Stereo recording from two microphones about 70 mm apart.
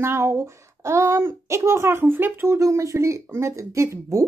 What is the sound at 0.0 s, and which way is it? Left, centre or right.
A child's voice, right.